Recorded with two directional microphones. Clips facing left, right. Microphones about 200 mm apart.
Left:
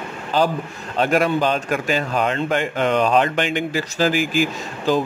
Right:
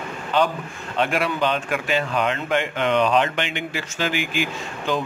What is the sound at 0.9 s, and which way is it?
A man's voice, 40° left (ahead or behind).